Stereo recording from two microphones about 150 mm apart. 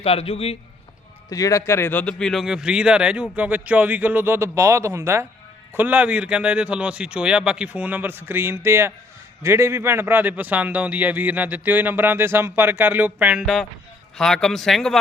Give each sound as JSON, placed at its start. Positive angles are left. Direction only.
{"t": 0.0, "sound": "a man's voice", "side_deg": 40}
{"t": 1.3, "sound": "speech", "side_deg": 20}